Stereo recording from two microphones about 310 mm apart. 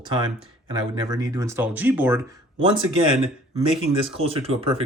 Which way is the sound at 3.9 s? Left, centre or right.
Centre.